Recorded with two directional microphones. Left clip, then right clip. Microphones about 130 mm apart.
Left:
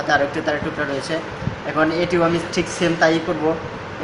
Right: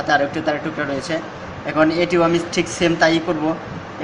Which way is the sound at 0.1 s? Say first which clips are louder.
Right 1 dB; 40° right (ahead or behind).